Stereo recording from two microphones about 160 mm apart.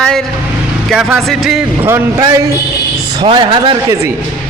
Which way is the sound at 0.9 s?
Centre (ahead or behind).